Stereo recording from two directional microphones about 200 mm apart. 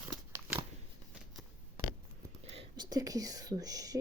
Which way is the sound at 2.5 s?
25° right (ahead or behind).